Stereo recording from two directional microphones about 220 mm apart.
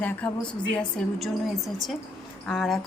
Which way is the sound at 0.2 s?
5° left (ahead or behind).